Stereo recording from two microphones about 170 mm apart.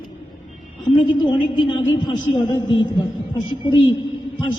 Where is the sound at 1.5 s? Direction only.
25° left (ahead or behind).